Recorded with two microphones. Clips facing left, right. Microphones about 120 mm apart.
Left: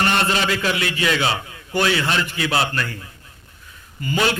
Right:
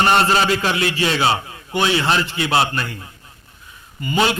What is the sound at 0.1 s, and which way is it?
A man's voice, 35° right (ahead or behind).